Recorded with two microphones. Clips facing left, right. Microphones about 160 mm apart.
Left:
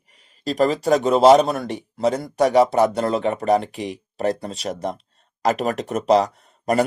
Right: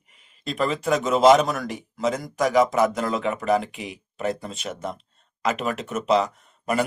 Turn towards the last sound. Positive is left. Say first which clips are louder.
# left 4 dB
turn(degrees=40)  # may be behind; listen again after turning